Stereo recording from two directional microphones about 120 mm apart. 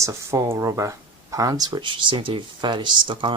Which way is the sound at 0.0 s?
25° right (ahead or behind).